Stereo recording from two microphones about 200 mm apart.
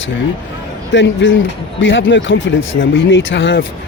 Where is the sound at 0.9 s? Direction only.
65° left (ahead or behind).